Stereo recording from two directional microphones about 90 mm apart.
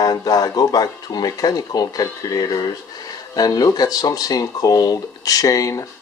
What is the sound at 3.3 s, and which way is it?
Speech, 45° left (ahead or behind).